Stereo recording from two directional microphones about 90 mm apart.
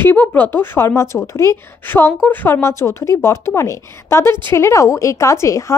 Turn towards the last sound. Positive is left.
turn(degrees=35)  # may be behind; listen again after turning